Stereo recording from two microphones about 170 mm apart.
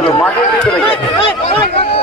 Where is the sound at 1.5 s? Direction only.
35° left (ahead or behind).